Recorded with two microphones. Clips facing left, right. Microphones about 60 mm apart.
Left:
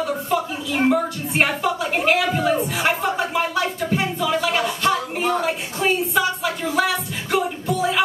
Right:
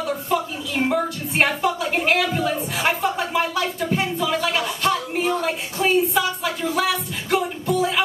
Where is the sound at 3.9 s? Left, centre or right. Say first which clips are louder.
Even; centre.